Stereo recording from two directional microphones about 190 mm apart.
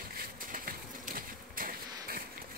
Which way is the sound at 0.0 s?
50° right (ahead or behind).